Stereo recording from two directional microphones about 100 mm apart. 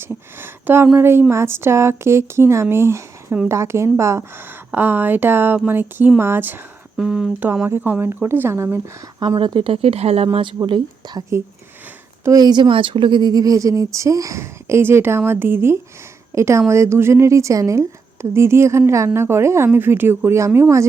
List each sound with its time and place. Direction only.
0.0 s speech: 20° right (ahead or behind)
6.9 s speech: 5° right (ahead or behind)
7.3 s speech: 20° right (ahead or behind)
9.2 s speech: 50° right (ahead or behind); by 10.2 s 90° right
10.7 s speech: 45° right (ahead or behind)
12.2 s speech: 40° right (ahead or behind)